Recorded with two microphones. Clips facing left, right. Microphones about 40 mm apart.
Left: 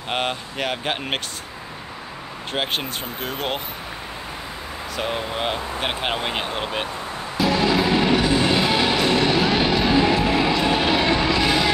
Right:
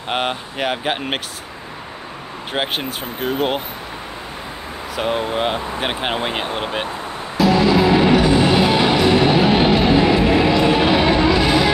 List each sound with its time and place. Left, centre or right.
0.1 s speech: centre
2.5 s speech: centre
5.0 s speech: centre
7.8 s music: centre